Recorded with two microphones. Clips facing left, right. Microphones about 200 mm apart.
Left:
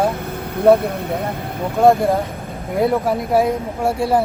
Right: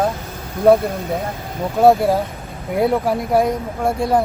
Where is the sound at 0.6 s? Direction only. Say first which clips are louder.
Even; 60° left (ahead or behind).